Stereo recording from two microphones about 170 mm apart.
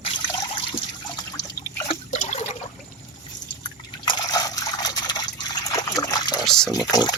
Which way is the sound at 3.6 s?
25° left (ahead or behind).